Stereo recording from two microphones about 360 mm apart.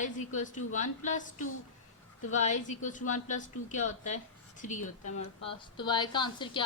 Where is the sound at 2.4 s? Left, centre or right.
Centre.